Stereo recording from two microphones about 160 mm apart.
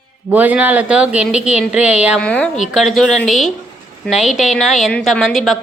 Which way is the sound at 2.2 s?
5° left (ahead or behind).